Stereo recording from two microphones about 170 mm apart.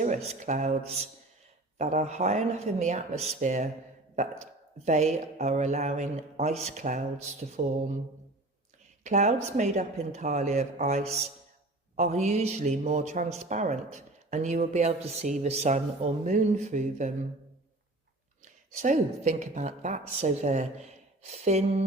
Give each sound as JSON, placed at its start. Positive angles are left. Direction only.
{"t": 0.0, "sound": "speech", "side_deg": -40}
{"t": 4.9, "sound": "speech", "side_deg": -45}
{"t": 9.0, "sound": "a man's voice", "side_deg": -45}
{"t": 18.4, "sound": "a man's voice", "side_deg": -45}